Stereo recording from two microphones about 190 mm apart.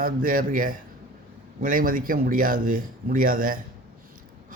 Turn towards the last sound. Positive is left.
turn(degrees=-45)  # may be behind; listen again after turning